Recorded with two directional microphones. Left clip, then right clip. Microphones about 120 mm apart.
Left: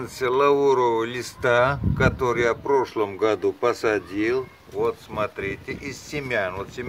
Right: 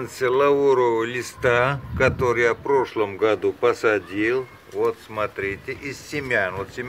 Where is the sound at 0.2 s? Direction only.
30° left (ahead or behind).